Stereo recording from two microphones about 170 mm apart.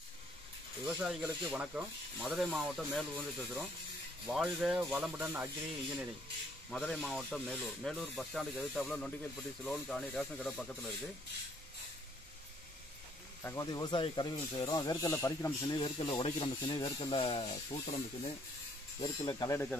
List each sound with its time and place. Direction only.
0.9 s speech: 5° right (ahead or behind)
6.8 s speech: 5° left (ahead or behind)
13.4 s speech: 15° left (ahead or behind); by 18.3 s 35° left (ahead or behind)
18.9 s speech: 20° left (ahead or behind)